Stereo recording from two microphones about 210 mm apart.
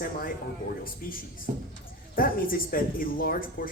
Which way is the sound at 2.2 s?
40° left (ahead or behind).